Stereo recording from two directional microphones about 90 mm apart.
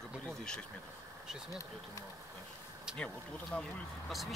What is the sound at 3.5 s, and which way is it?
Speech, 15° left (ahead or behind).